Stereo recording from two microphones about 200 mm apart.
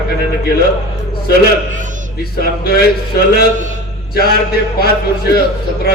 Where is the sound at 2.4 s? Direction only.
50° left (ahead or behind).